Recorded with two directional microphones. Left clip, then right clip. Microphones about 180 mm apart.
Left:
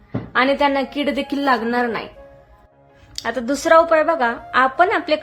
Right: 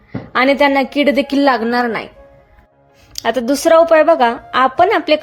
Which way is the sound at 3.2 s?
25° right (ahead or behind).